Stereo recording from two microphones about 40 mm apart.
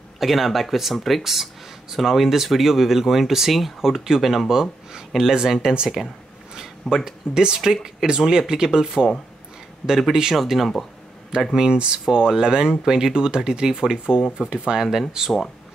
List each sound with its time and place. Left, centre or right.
0.2 s speech: centre
6.5 s a sound: centre
7.1 s speech: centre
10.3 s speech: centre
11.5 s speech: centre